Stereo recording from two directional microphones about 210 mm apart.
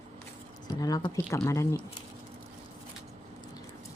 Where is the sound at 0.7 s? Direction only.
15° left (ahead or behind).